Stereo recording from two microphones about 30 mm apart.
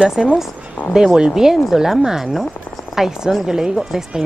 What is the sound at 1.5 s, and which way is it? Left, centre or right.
Speech, centre.